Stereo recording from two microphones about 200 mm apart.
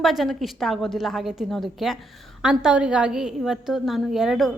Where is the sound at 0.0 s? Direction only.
Centre (ahead or behind).